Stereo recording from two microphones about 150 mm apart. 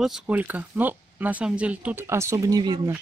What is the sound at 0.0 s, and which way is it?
Speech, 5° right (ahead or behind).